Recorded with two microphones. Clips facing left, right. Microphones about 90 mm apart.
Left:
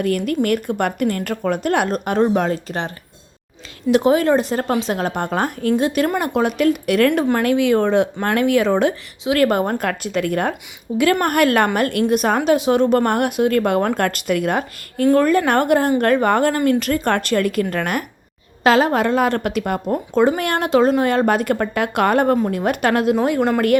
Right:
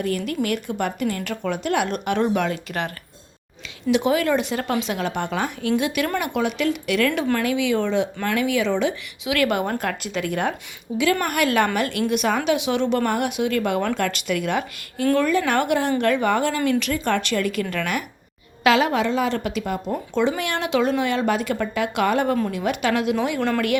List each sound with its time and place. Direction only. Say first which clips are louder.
0.0 s a woman's voice: left 5 dB; 55° left (ahead or behind); by 2.9 s 30° left (ahead or behind)
3.9 s a woman's voice: left 5 dB; 35° left (ahead or behind); by 19.8 s 55° left (ahead or behind)
20.1 s speech: left 6 dB; 45° left (ahead or behind)